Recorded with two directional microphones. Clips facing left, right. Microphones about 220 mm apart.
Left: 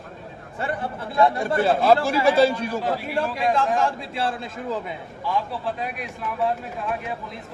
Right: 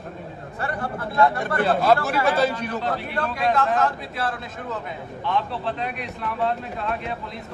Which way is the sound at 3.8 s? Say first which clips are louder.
Left 1 dB; 30° left (ahead or behind).